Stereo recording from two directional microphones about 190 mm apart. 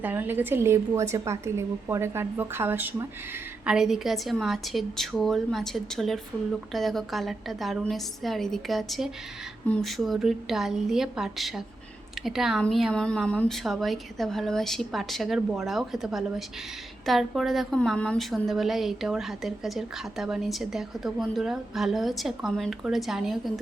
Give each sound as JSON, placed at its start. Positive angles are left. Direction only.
{"t": 0.0, "sound": "a woman's voice", "side_deg": -10}